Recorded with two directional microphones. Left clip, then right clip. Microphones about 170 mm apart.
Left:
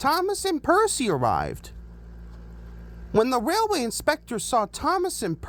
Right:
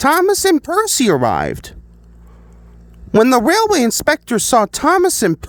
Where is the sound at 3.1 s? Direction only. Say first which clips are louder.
Right 11 dB; 55° right (ahead or behind).